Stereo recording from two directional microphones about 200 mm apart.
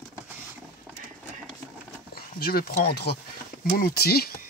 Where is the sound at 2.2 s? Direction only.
50° left (ahead or behind).